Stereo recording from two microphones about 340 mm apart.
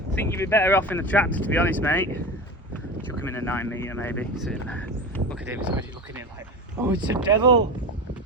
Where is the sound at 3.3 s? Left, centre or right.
Centre.